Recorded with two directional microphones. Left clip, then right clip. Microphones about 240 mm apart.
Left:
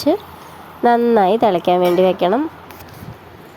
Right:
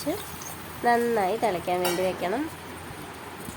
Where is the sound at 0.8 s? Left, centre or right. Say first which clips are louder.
Left 10 dB; left.